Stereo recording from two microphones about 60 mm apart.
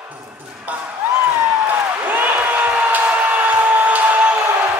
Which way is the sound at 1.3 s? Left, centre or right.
Right.